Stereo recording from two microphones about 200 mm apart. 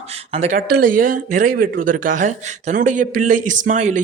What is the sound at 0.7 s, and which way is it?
Speech, 45° right (ahead or behind).